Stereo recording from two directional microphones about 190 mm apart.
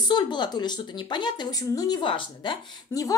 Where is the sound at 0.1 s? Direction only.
25° left (ahead or behind).